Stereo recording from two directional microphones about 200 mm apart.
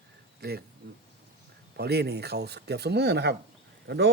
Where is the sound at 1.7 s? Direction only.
55° right (ahead or behind).